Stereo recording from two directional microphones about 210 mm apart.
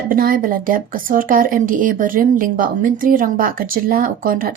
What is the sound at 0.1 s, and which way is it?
Speech, 45° right (ahead or behind).